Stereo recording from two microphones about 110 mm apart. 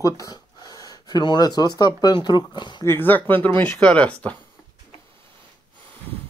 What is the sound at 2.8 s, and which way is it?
Speech, 20° left (ahead or behind).